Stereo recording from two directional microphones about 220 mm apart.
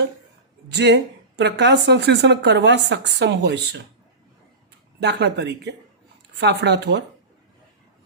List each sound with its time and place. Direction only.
0.7 s speech: 50° right (ahead or behind)
4.9 s speech: 50° right (ahead or behind)